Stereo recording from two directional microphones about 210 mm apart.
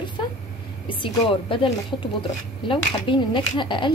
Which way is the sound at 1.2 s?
25° left (ahead or behind).